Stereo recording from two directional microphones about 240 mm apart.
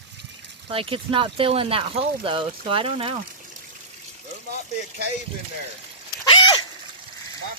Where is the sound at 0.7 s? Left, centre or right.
Right.